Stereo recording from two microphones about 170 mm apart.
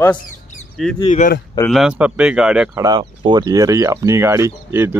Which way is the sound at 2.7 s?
20° right (ahead or behind).